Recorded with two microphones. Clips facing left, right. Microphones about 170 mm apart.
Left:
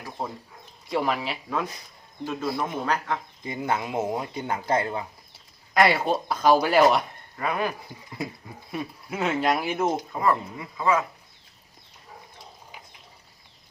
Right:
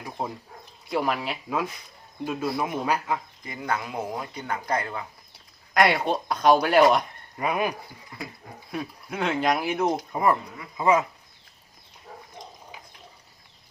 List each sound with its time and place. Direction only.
0.2 s speech: 15° right (ahead or behind)
0.9 s speech: centre (ahead or behind)
3.4 s speech: 25° left (ahead or behind)
5.7 s speech: centre (ahead or behind)
7.3 s speech: 15° right (ahead or behind)
8.7 s speech: centre (ahead or behind)
10.1 s speech: 15° right (ahead or behind)